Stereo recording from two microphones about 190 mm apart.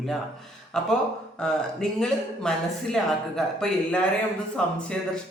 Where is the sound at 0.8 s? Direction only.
Centre (ahead or behind).